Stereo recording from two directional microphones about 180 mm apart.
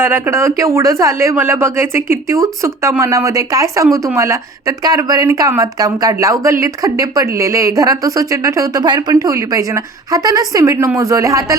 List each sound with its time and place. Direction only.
0.0 s speech: 15° right (ahead or behind)